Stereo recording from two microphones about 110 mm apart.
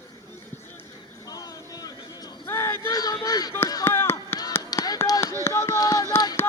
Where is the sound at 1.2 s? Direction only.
35° left (ahead or behind).